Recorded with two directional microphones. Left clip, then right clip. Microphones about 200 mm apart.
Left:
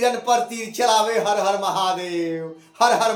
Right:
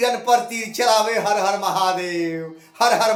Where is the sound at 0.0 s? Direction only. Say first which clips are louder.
Right 1 dB; 15° right (ahead or behind).